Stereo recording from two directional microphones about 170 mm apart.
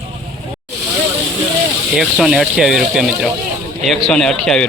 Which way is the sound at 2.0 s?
Centre (ahead or behind).